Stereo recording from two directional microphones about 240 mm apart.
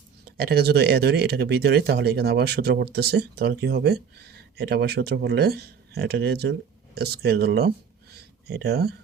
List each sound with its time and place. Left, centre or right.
0.3 s speech: right